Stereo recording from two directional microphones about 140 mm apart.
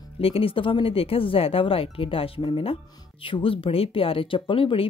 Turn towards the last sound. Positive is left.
turn(degrees=40)  # may be behind; listen again after turning